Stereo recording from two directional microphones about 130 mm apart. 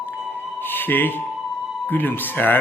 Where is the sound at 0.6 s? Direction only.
15° left (ahead or behind).